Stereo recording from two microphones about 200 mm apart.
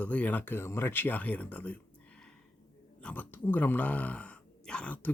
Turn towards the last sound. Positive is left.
turn(degrees=5)  # may be behind; listen again after turning